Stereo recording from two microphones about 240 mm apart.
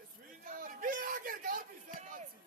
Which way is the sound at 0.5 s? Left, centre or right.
Right.